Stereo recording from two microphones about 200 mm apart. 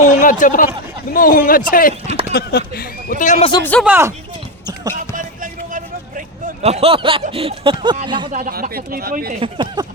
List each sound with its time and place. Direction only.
0.0 s speech: 40° left (ahead or behind)
2.0 s speech: 35° right (ahead or behind)
2.3 s speech: 50° left (ahead or behind); by 3.5 s 35° left (ahead or behind)
3.6 s speech: 10° left (ahead or behind)
3.8 s speech: 10° right (ahead or behind)
5.1 s vehicle: 40° right (ahead or behind); by 7.9 s 25° right (ahead or behind)
8.0 s speech: 25° right (ahead or behind)
8.3 s speech: 45° right (ahead or behind)
9.4 s speech: 20° right (ahead or behind)